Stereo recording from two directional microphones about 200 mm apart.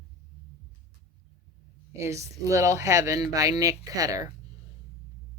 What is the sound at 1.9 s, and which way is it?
Speech, 15° right (ahead or behind).